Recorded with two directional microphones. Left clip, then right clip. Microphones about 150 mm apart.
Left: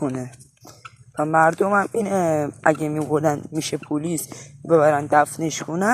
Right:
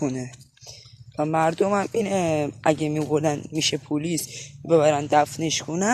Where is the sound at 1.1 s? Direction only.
15° right (ahead or behind).